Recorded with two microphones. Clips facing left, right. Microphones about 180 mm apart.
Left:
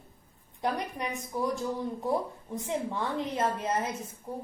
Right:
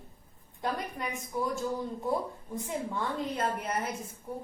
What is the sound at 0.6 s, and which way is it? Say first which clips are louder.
A woman's voice: left 2 dB; 20° left (ahead or behind).